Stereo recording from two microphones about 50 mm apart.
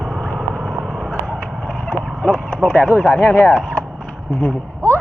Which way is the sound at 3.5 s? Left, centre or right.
Centre.